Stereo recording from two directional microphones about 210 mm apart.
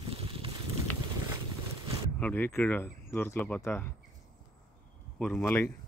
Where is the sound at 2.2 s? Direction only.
10° left (ahead or behind).